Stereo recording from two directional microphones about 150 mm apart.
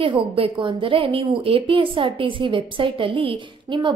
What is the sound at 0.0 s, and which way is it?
A woman's voice, 35° right (ahead or behind).